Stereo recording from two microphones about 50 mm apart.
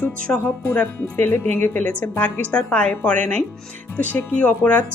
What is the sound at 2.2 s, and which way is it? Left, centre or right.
A woman's voice, left.